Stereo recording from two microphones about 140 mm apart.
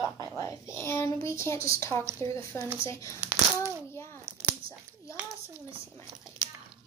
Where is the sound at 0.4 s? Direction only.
20° left (ahead or behind).